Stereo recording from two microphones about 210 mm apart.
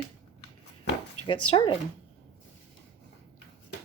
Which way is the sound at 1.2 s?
90° left.